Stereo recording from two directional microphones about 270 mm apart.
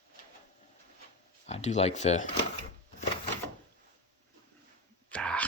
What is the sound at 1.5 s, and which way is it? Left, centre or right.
Speech, left.